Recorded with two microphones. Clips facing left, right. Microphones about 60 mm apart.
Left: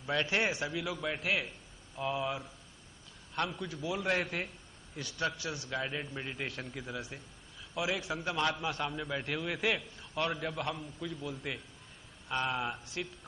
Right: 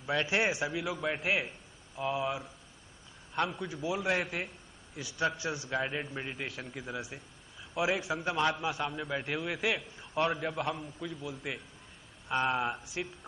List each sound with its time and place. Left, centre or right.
0.0 s a man's voice: centre
2.0 s a man's voice: centre
3.4 s a man's voice: centre
4.0 s a man's voice: centre
5.3 s a man's voice: right
6.3 s a man's voice: centre
7.7 s a man's voice: right
8.1 s a man's voice: centre
9.9 s a man's voice: centre